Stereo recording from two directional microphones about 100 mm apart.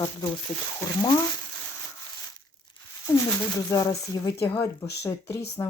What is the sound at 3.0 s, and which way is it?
Speech, 30° left (ahead or behind).